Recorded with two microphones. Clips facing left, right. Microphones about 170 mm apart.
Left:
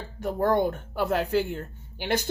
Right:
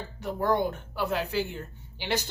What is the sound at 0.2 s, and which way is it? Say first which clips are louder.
Speech: left 3 dB; 50° left (ahead or behind).